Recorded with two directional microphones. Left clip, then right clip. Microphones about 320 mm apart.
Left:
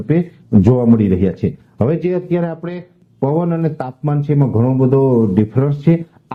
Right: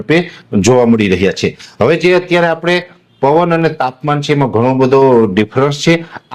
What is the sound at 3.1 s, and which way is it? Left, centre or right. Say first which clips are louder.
Speech: right 8 dB; right.